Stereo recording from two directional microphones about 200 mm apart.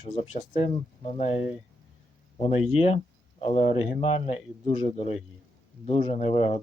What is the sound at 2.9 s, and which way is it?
Speech, 30° left (ahead or behind).